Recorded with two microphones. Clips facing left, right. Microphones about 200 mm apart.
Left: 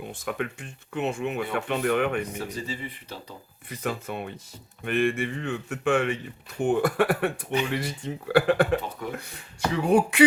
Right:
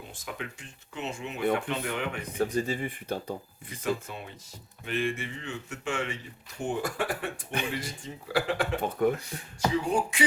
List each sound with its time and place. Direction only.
0.1 s speech: 55° left (ahead or behind)
2.4 s speech: 50° right (ahead or behind)
3.8 s speech: 60° left (ahead or behind)
9.0 s speech: 55° right (ahead or behind)
9.7 s speech: 65° left (ahead or behind)